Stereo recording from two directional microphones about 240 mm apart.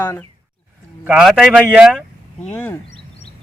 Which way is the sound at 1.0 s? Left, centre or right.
Centre.